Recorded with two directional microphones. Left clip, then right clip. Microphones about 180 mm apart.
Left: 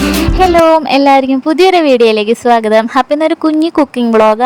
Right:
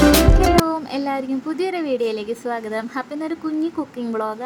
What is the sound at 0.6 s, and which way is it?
A woman's voice, 50° left (ahead or behind).